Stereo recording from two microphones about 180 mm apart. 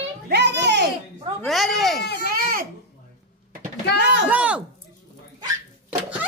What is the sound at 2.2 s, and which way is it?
Baby cry, 55° right (ahead or behind).